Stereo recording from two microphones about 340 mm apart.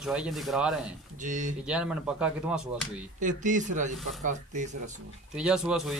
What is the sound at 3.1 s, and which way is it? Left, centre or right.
Speech, right.